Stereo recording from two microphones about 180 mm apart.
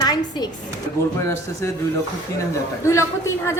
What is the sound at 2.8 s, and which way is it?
Speech, 15° left (ahead or behind).